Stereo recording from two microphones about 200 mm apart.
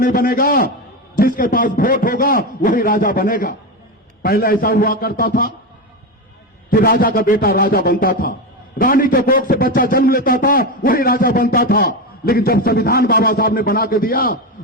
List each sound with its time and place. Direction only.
0.0 s a man's voice: 45° left (ahead or behind)
6.7 s a man's voice: 50° left (ahead or behind)